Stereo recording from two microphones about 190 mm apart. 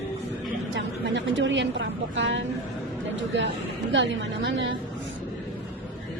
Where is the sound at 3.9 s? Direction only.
70° right (ahead or behind).